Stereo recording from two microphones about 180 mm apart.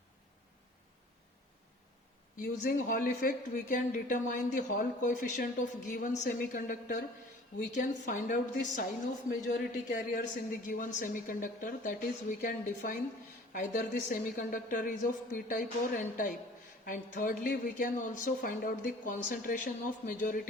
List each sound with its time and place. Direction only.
2.4 s speech: 50° left (ahead or behind)